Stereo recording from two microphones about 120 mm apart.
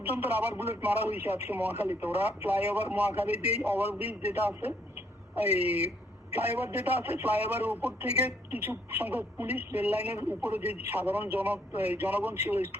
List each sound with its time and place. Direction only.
0.1 s speech: 15° right (ahead or behind)